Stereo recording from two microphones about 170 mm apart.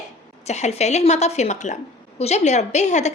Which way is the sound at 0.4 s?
40° left (ahead or behind).